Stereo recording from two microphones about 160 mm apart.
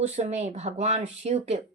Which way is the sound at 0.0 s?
45° right (ahead or behind).